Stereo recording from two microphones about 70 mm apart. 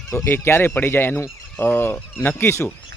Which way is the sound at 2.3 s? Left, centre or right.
Left.